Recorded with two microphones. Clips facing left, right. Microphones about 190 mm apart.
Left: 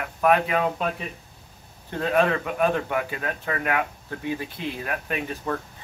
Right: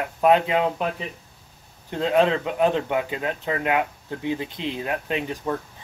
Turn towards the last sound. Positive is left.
turn(degrees=-20)  # may be behind; listen again after turning